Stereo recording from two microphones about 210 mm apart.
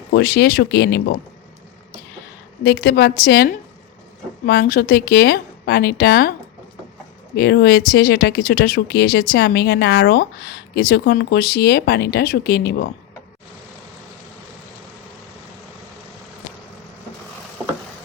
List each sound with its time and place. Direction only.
0.1 s speech: 50° left (ahead or behind)
2.6 s speech: 50° left (ahead or behind)
7.3 s speech: 50° left (ahead or behind)